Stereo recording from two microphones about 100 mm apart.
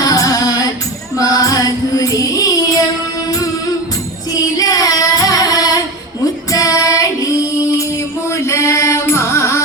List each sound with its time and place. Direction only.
0.0 s music: 35° left (ahead or behind)
4.5 s female singing: 35° left (ahead or behind)
6.5 s child singing: 35° left (ahead or behind)
8.3 s chant: 30° left (ahead or behind)